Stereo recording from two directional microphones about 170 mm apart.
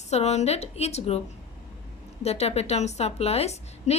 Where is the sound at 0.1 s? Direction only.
40° left (ahead or behind).